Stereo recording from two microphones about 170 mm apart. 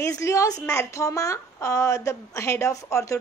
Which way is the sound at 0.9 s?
20° left (ahead or behind).